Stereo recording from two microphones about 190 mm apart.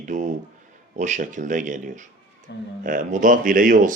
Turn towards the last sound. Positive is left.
turn(degrees=-45)  # may be behind; listen again after turning